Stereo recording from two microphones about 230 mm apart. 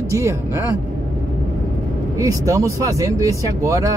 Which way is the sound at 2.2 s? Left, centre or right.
Centre.